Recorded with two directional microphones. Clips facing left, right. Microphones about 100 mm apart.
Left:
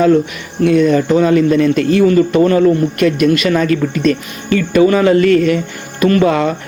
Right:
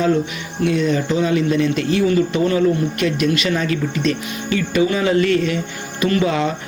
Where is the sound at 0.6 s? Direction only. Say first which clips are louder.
Left 7 dB; 55° left (ahead or behind).